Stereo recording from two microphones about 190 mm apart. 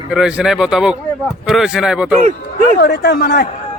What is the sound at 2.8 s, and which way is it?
Speech, 55° left (ahead or behind).